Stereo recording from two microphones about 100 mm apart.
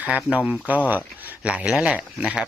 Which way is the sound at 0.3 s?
15° right (ahead or behind).